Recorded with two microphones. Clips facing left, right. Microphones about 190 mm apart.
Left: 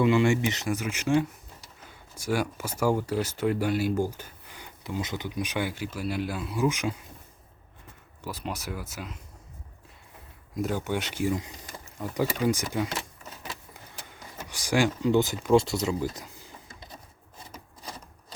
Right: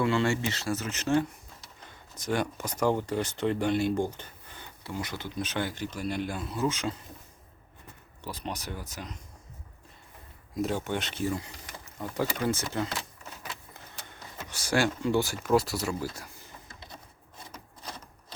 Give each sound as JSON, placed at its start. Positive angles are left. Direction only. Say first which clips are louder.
{"t": 0.0, "sound": "speech", "louder": "left 4 dB", "side_deg": 15}
{"t": 8.2, "sound": "speech", "louder": "left 2 dB", "side_deg": 5}
{"t": 10.5, "sound": "speech", "louder": "left 1 dB", "side_deg": 0}
{"t": 14.3, "sound": "speech", "louder": "left 2 dB", "side_deg": 15}